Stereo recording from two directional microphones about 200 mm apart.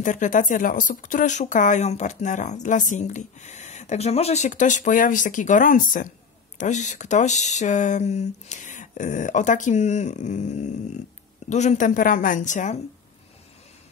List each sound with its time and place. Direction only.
0.0 s speech: 40° left (ahead or behind)